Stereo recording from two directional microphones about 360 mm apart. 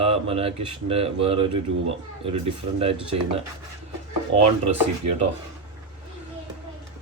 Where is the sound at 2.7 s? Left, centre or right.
Centre.